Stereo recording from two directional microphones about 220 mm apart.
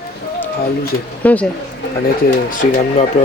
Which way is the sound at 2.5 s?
35° left (ahead or behind).